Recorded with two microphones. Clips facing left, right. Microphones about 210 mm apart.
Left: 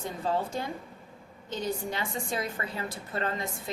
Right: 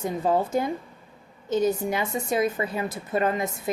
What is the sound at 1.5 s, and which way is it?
A woman's voice, 20° right (ahead or behind).